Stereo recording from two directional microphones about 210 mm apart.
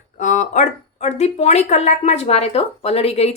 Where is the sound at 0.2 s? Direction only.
35° left (ahead or behind).